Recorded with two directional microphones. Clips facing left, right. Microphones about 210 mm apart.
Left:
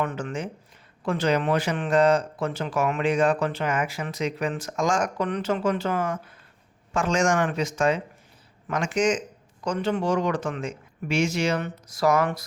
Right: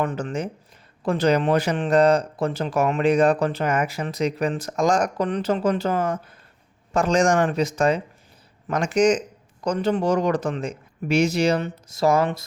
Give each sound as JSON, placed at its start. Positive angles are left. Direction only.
{"t": 0.0, "sound": "speech", "side_deg": -35}